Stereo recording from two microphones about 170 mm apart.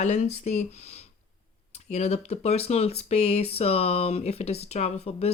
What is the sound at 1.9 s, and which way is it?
Speech, 40° left (ahead or behind).